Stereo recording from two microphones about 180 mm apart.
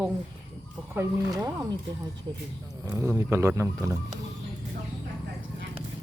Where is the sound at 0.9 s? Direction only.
15° right (ahead or behind).